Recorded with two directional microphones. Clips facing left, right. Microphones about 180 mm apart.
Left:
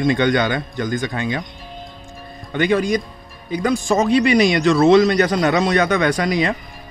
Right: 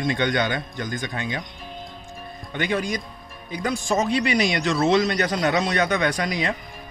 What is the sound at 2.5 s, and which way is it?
Speech, 90° left.